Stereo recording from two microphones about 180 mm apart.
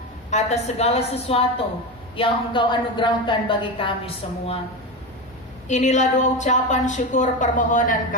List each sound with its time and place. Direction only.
0.3 s a woman's voice: 40° left (ahead or behind)
5.6 s a woman's voice: 40° left (ahead or behind)